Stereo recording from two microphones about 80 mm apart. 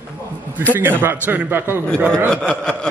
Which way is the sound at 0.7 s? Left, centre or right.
Right.